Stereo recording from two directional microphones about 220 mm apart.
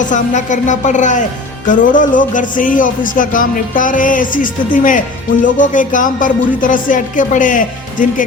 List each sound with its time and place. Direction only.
0.0 s speech: 35° left (ahead or behind)